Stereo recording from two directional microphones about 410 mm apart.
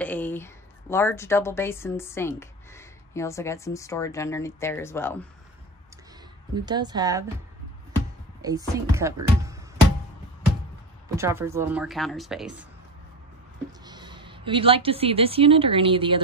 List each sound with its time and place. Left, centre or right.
0.0 s a woman's voice: centre
6.5 s speech: centre
8.4 s speech: centre
11.1 s speech: centre
13.7 s a woman's voice: centre